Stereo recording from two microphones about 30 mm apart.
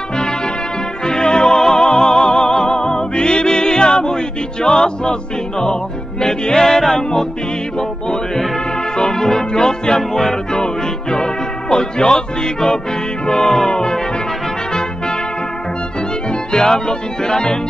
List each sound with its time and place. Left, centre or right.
1.0 s music: left
6.2 s music: left
8.9 s music: centre
13.3 s music: centre
13.7 s brass instrument: left
16.5 s music: left